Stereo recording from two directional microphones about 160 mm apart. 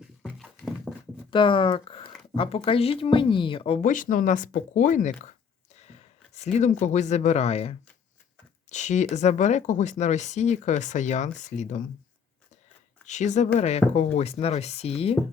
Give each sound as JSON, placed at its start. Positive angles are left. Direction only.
{"t": 0.0, "sound": "a sound", "side_deg": 0}
{"t": 1.3, "sound": "speech", "side_deg": 30}
{"t": 13.1, "sound": "speech", "side_deg": 50}